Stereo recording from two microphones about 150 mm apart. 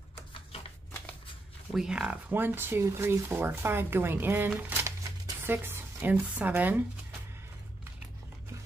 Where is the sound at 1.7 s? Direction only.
5° right (ahead or behind).